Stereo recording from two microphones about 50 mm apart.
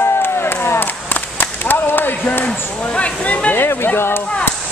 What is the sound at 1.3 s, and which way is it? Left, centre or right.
Whip, left.